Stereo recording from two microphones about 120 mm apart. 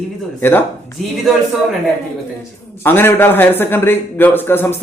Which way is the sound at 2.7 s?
20° left (ahead or behind).